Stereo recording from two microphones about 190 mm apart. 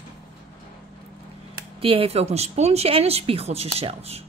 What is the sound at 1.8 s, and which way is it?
A woman's voice, 30° right (ahead or behind).